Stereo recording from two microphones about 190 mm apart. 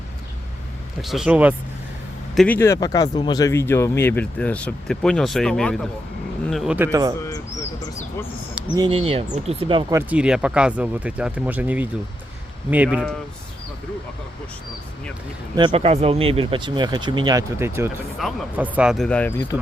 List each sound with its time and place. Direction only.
1.0 s speech: centre (ahead or behind)
2.6 s speech: 15° left (ahead or behind); by 7.1 s 15° right (ahead or behind)
8.7 s speech: 25° right (ahead or behind)
9.9 s speech: 5° right (ahead or behind)
15.5 s speech: 30° right (ahead or behind)
18.2 s speech: centre (ahead or behind)